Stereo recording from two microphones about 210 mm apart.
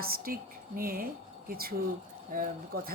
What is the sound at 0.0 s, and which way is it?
A woman's voice, 45° right (ahead or behind).